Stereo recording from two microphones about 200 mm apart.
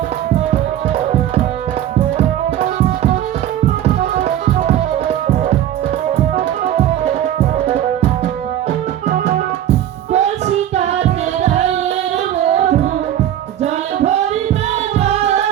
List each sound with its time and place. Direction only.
2.1 s tabla: 30° right (ahead or behind)
10.1 s music: 35° right (ahead or behind)
12.5 s music: 35° right (ahead or behind)
14.9 s music: 35° right (ahead or behind)